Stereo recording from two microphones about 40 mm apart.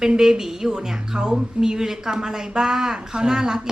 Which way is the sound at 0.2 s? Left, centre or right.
Centre.